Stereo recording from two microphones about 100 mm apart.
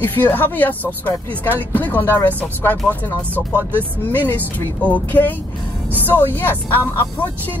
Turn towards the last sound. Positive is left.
turn(degrees=20)  # may be behind; listen again after turning